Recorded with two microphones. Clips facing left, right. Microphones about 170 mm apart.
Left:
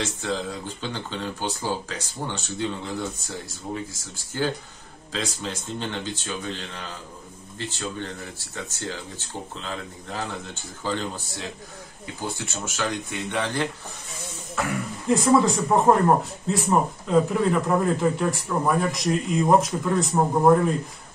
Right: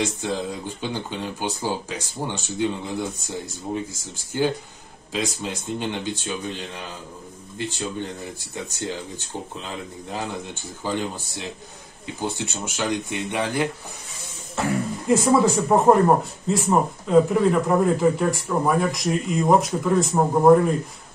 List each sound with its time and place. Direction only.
0.0 s speech: 15° right (ahead or behind)
15.0 s speech: centre (ahead or behind)